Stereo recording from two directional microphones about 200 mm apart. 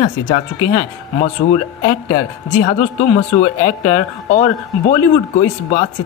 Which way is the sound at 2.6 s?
30° left (ahead or behind).